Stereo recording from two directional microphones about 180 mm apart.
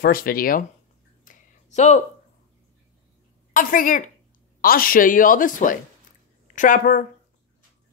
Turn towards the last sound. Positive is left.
turn(degrees=50)  # may be behind; listen again after turning